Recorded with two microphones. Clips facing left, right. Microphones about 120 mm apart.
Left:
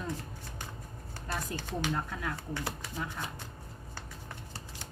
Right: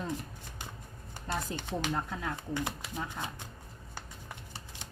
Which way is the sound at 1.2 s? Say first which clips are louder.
Right 1 dB; 25° right (ahead or behind).